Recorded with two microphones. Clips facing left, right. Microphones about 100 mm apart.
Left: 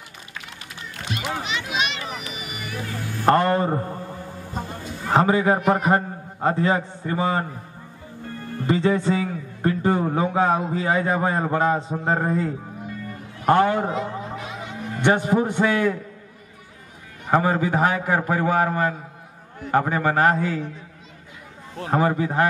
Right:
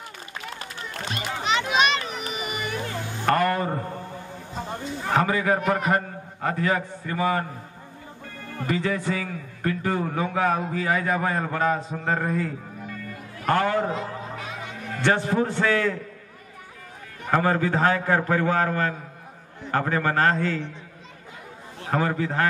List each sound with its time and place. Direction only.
0.6 s run: 40° right (ahead or behind)
1.7 s a sound: 45° right (ahead or behind)
2.9 s a sound: 20° right (ahead or behind)
3.3 s a man's voice: 25° left (ahead or behind)
5.1 s a man's voice: 25° left (ahead or behind)
8.6 s a man's voice: 25° left (ahead or behind)
14.9 s a man's voice: 20° left (ahead or behind)
17.3 s a man's voice: 15° left (ahead or behind)
21.9 s a man's voice: 20° left (ahead or behind)